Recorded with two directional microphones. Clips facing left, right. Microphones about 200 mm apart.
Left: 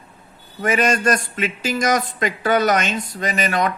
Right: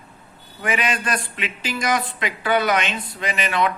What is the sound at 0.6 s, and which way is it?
A man's voice, 45° left (ahead or behind).